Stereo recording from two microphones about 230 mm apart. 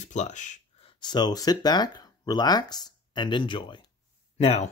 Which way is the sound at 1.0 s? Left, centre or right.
Centre.